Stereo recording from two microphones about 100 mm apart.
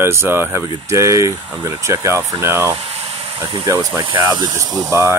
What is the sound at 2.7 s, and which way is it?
Boiling, 90° right.